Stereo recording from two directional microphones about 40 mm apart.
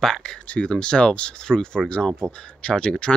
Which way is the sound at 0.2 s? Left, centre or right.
Left.